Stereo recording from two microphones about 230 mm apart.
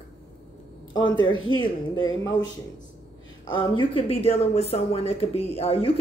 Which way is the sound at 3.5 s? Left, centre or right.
Left.